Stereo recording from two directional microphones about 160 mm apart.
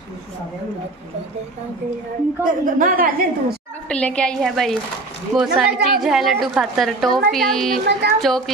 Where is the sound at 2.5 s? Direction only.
55° right (ahead or behind).